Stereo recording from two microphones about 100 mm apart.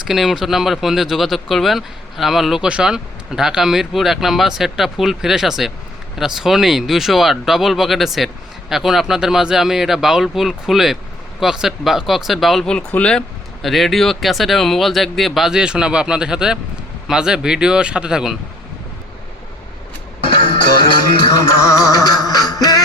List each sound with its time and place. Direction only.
0.0 s speech: 5° right (ahead or behind)
20.2 s music: 50° left (ahead or behind)
21.3 s music: 35° left (ahead or behind)